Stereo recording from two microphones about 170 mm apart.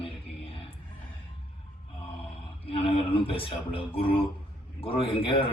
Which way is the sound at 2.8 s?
30° left (ahead or behind).